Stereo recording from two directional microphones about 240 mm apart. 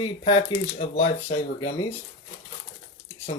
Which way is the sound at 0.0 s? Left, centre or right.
Left.